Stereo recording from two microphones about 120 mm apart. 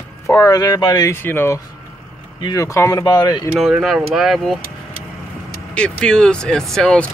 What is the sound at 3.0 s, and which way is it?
Speech, 35° left (ahead or behind).